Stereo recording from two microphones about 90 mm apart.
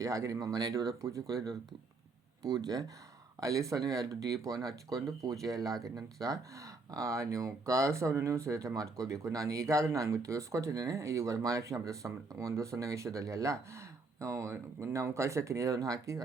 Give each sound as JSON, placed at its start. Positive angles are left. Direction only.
{"t": 0.0, "sound": "speech", "side_deg": -40}